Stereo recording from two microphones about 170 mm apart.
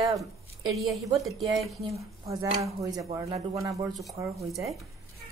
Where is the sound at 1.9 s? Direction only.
20° right (ahead or behind).